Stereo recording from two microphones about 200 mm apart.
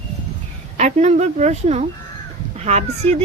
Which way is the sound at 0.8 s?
35° right (ahead or behind).